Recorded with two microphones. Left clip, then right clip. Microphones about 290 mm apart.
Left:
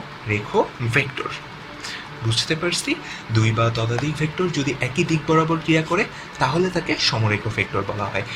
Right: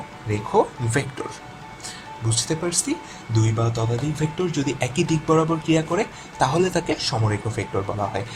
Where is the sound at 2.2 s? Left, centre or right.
Right.